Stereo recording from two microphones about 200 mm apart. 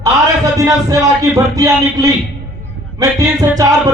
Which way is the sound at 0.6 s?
20° right (ahead or behind).